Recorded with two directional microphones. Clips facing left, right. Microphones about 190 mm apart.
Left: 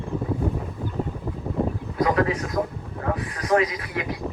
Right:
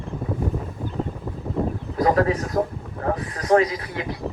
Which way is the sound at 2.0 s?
40° right (ahead or behind).